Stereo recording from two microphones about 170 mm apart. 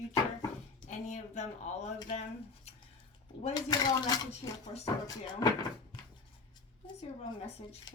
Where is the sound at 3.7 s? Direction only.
20° left (ahead or behind).